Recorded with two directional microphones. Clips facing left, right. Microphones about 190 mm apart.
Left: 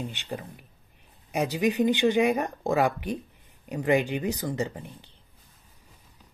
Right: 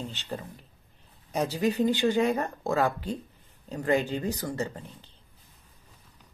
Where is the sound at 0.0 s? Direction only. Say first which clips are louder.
Left 1 dB; 15° left (ahead or behind).